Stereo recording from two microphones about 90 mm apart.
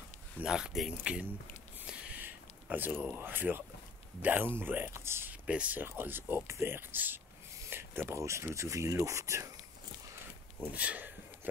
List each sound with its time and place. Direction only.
0.4 s speech: 10° right (ahead or behind)
1.9 s a sound: 20° right (ahead or behind)
3.2 s speech: 20° right (ahead or behind)
5.3 s speech: 15° right (ahead or behind); by 9.5 s 35° right (ahead or behind)
10.7 s speech: 15° right (ahead or behind)